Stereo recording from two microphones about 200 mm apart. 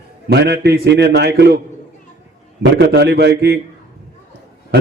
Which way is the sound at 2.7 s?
60° right (ahead or behind).